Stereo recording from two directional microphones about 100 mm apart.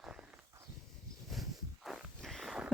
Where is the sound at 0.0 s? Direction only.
10° right (ahead or behind).